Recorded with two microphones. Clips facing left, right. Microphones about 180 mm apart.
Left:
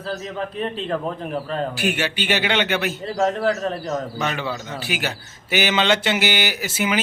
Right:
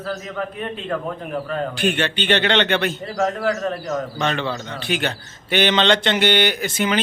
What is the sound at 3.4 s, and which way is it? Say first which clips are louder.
Speech: even; 30° left (ahead or behind).